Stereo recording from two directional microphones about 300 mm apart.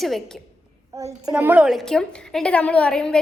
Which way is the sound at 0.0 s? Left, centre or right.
Centre.